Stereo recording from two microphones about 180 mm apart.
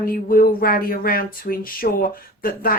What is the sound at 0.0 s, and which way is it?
Speech, 55° left (ahead or behind).